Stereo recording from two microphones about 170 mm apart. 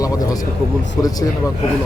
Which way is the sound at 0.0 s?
20° left (ahead or behind).